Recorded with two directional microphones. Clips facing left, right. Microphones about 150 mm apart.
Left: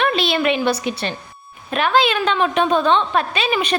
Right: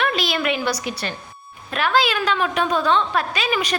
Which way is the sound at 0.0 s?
25° left (ahead or behind).